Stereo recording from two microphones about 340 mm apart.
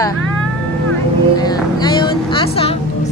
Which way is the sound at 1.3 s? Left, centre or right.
Centre.